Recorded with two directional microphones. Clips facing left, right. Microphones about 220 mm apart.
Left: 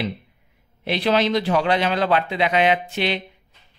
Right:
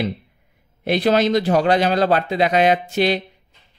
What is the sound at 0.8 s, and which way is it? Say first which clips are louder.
A man's voice: right 3 dB; 45° right (ahead or behind).